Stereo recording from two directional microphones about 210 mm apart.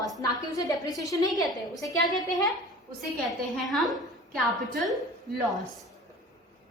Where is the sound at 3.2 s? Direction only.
Centre (ahead or behind).